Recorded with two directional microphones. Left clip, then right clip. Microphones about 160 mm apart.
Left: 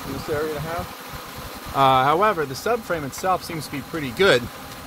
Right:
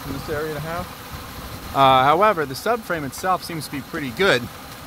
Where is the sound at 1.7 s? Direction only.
20° right (ahead or behind).